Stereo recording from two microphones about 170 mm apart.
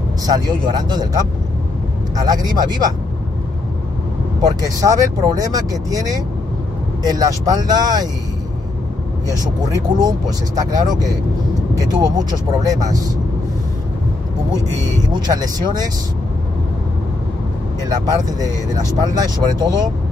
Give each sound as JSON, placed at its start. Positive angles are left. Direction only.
{"t": 0.3, "sound": "speech", "side_deg": -25}
{"t": 4.4, "sound": "speech", "side_deg": -20}
{"t": 9.9, "sound": "speech", "side_deg": -25}
{"t": 15.0, "sound": "speech", "side_deg": -25}
{"t": 17.8, "sound": "speech", "side_deg": -20}